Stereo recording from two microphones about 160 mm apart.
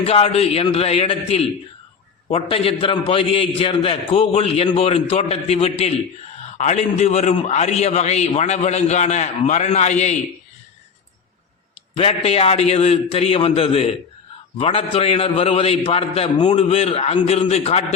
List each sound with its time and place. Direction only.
0.0 s a man's voice: 40° left (ahead or behind)
11.9 s a man's voice: 35° left (ahead or behind)